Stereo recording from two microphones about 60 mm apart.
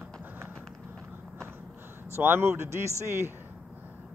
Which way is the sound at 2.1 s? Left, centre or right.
Right.